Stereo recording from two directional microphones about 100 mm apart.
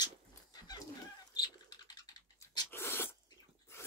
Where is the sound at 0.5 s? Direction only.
45° left (ahead or behind).